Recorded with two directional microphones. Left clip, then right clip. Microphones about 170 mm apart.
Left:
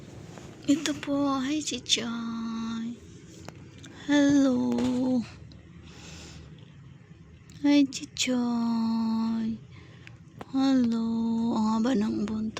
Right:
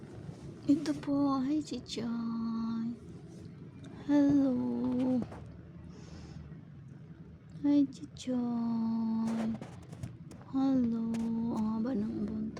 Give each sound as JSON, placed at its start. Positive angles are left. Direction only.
{"t": 0.6, "sound": "speech", "side_deg": 0}
{"t": 3.9, "sound": "a sound", "side_deg": 0}
{"t": 7.6, "sound": "speech", "side_deg": 15}
{"t": 10.5, "sound": "speech", "side_deg": 10}